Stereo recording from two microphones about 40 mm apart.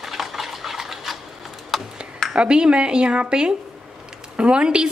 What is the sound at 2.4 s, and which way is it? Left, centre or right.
A woman's voice, right.